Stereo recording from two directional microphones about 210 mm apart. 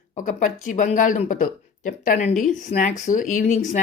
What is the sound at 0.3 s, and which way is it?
A woman's voice, 40° left (ahead or behind).